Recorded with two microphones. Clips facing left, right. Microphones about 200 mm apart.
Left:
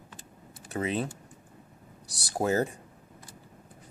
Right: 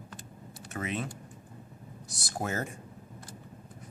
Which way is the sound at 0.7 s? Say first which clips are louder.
Left 5 dB; 35° left (ahead or behind).